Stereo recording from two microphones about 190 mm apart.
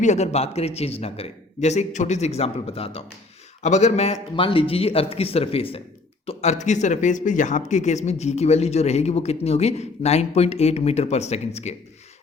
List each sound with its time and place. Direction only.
0.0 s speech: 35° left (ahead or behind)